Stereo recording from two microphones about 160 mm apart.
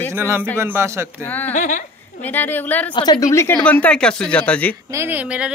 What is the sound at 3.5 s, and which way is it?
Speech, 10° left (ahead or behind).